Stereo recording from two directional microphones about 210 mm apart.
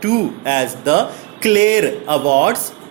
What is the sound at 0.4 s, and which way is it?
A man's voice, 20° right (ahead or behind).